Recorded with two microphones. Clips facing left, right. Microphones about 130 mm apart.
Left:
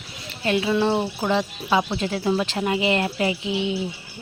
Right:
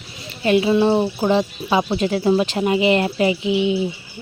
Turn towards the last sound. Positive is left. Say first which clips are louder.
# right 6 dB
turn(degrees=-15)  # may be behind; listen again after turning